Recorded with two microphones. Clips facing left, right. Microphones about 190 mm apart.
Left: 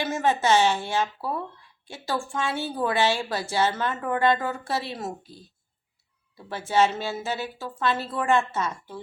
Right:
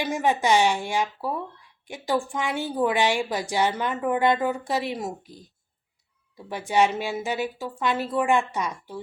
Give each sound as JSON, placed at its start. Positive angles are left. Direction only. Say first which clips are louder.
{"t": 0.0, "sound": "a woman's voice", "louder": "even", "side_deg": -15}